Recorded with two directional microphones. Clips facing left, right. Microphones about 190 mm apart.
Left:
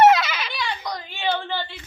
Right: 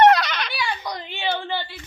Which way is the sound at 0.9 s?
15° right (ahead or behind).